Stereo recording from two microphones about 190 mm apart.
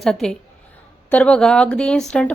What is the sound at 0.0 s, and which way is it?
Speech, centre (ahead or behind).